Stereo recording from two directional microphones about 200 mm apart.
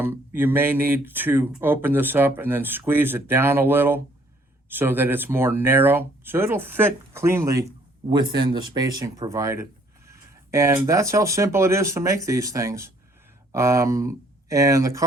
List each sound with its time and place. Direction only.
0.0 s speech: 10° right (ahead or behind)
10.1 s a sound: 15° right (ahead or behind)
10.8 s speech: 15° right (ahead or behind)